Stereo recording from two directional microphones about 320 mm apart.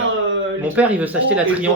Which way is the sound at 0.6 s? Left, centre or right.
Centre.